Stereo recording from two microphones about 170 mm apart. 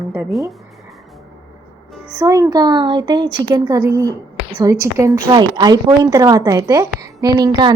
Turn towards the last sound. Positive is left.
turn(degrees=-20)  # may be behind; listen again after turning